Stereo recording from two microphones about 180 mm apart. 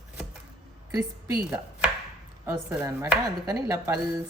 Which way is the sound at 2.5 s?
15° right (ahead or behind).